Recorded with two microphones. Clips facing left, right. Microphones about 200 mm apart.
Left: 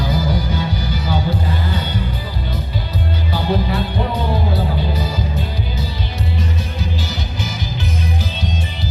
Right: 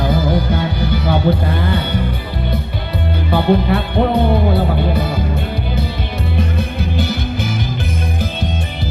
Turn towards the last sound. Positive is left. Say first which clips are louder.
# right 6 dB
turn(degrees=-55)  # may be behind; listen again after turning